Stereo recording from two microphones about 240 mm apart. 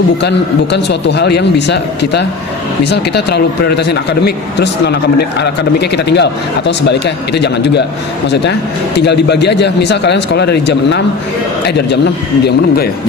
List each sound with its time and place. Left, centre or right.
0.2 s a man's voice: left
7.3 s a man's voice: left
9.0 s a man's voice: left
12.5 s speech: left